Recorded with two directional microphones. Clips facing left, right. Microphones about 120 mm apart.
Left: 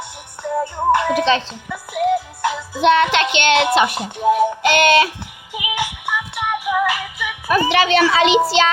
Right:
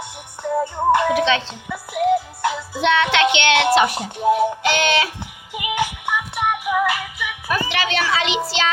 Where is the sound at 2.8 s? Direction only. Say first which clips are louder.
Left 4 dB; 40° left (ahead or behind).